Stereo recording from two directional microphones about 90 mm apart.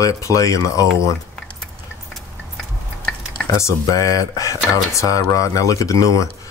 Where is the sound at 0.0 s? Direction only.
35° left (ahead or behind).